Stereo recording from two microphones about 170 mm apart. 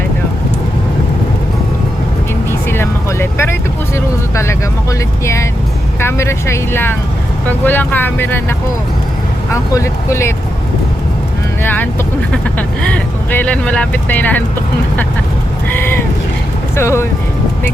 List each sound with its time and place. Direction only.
2.5 s vehicle: 15° left (ahead or behind)
3.9 s speech: 15° left (ahead or behind)
11.6 s speech: 10° left (ahead or behind)
15.7 s speech: 15° left (ahead or behind)